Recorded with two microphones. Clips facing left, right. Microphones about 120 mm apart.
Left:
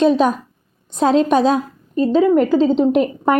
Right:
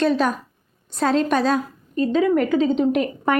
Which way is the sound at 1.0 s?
30° left (ahead or behind).